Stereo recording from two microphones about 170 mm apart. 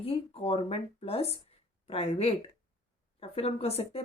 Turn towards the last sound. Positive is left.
turn(degrees=35)  # may be behind; listen again after turning